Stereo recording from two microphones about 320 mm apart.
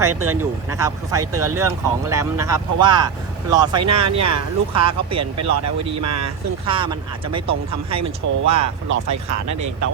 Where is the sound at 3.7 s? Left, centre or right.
Right.